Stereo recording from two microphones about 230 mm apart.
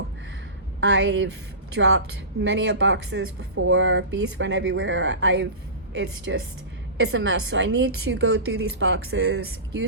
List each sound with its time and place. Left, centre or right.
0.8 s a woman's voice: right